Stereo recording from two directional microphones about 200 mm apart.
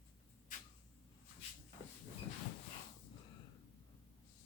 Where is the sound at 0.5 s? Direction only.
40° left (ahead or behind).